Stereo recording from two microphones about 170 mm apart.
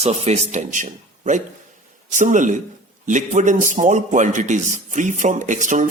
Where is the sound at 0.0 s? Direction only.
40° right (ahead or behind).